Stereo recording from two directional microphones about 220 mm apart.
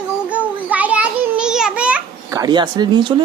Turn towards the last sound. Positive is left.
turn(degrees=-20)  # may be behind; listen again after turning